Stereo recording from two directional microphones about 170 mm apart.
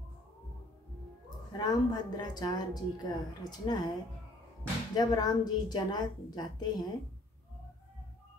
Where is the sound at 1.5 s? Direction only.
25° left (ahead or behind).